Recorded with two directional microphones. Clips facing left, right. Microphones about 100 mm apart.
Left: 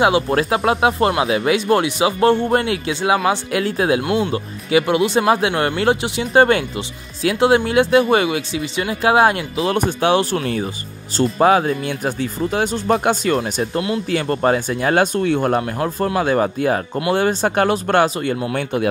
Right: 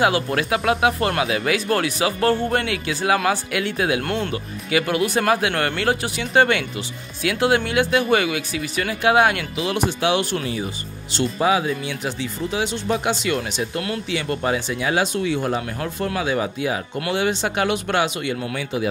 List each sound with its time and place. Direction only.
0.0 s speech: 30° left (ahead or behind)
4.0 s speech: 10° left (ahead or behind)
4.3 s speech: 25° left (ahead or behind)
9.8 s speech: 45° left (ahead or behind)
13.7 s speech: 25° left (ahead or behind)
14.1 s speech: 40° left (ahead or behind)
18.5 s a man's voice: 55° left (ahead or behind)